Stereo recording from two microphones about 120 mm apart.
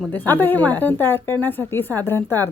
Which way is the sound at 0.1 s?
15° left (ahead or behind).